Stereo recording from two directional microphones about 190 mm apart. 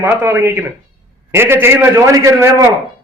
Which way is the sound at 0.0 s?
10° right (ahead or behind).